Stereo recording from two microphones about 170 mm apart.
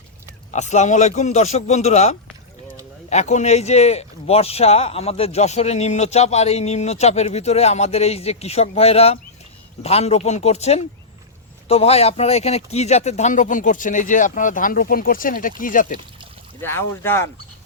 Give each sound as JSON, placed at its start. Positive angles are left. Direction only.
{"t": 0.5, "sound": "a man's voice", "side_deg": 45}
{"t": 16.6, "sound": "speech", "side_deg": 15}